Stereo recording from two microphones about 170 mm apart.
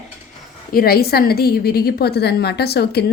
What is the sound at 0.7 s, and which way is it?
A woman's voice, 60° left (ahead or behind).